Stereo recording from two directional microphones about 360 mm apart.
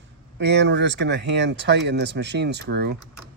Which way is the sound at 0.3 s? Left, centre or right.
Right.